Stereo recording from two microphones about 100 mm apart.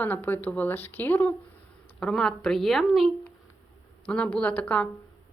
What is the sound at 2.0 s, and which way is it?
Speech, 5° left (ahead or behind).